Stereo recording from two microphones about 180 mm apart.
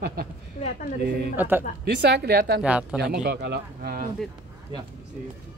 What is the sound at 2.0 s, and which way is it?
Speech, 65° right (ahead or behind).